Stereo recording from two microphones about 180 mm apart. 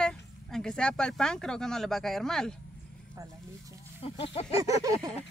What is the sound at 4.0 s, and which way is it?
Speech, 30° left (ahead or behind).